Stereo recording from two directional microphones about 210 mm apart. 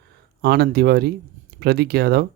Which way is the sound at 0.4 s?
45° right (ahead or behind).